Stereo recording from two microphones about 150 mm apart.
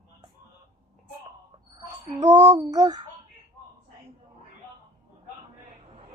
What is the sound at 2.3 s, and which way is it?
Speech, 25° right (ahead or behind).